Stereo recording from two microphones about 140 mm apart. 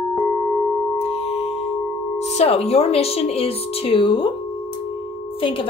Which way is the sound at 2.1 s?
50° left (ahead or behind).